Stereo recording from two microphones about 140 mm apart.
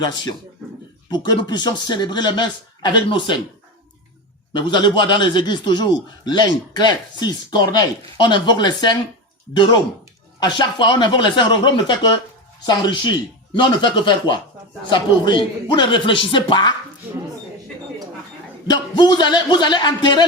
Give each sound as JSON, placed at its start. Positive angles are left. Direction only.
{"t": 0.0, "sound": "a man's voice", "side_deg": 30}
{"t": 4.5, "sound": "a man's voice", "side_deg": 35}
{"t": 10.4, "sound": "a man's voice", "side_deg": 30}
{"t": 18.7, "sound": "a man's voice", "side_deg": 30}